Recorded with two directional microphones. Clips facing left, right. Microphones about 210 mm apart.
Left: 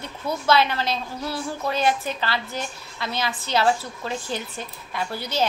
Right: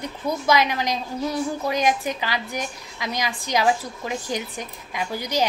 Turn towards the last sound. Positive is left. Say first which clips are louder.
# right 1 dB
turn(degrees=-15)  # may be behind; listen again after turning